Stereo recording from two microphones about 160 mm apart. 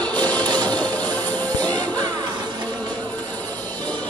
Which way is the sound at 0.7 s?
10° left (ahead or behind).